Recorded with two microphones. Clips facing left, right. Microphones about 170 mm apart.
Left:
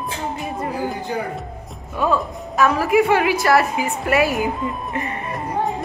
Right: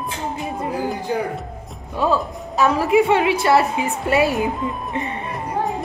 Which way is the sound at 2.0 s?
30° right (ahead or behind).